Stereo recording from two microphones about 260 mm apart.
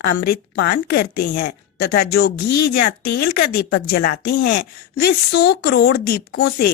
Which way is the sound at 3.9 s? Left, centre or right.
Left.